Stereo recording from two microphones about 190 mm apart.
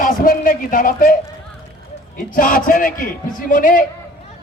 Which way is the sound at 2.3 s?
45° left (ahead or behind).